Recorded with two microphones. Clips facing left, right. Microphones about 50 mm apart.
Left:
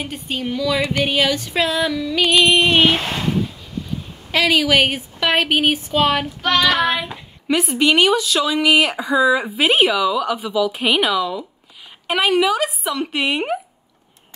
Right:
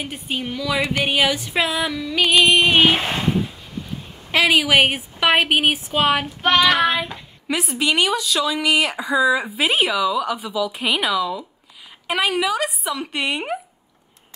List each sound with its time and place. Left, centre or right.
0.0 s child singing: centre
0.7 s a woman's voice: centre
1.0 s child singing: centre
2.5 s speech: centre
4.3 s child singing: centre
7.1 s a woman's voice: centre